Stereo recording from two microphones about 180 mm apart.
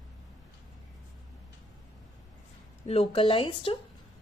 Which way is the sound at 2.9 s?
30° left (ahead or behind).